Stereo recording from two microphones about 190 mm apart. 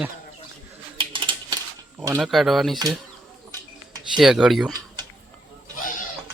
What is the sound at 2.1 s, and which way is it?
Speech, centre (ahead or behind).